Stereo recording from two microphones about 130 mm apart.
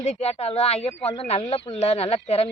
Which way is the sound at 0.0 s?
55° left (ahead or behind).